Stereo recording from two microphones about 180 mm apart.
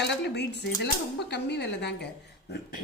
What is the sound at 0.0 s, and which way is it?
Speech, 70° left (ahead or behind).